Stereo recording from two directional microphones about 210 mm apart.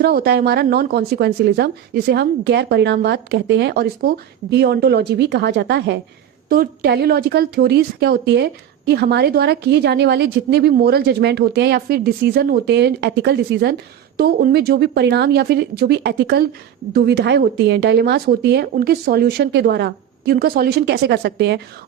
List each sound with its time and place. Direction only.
0.0 s speech: 45° right (ahead or behind)